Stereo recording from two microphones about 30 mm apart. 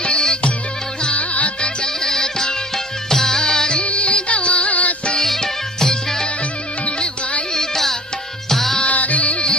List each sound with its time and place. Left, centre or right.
0.0 s music: left
1.1 s music: left
1.6 s music: left
3.8 s music: left
5.1 s music: centre
6.8 s music: left
7.5 s music: centre
8.9 s music: left